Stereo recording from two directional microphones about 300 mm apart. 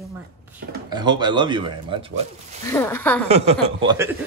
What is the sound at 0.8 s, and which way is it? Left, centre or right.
Speech, centre.